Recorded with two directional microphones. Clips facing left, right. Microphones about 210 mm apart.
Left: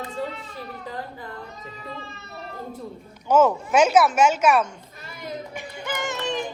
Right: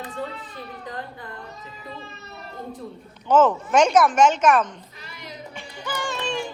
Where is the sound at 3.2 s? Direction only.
10° left (ahead or behind).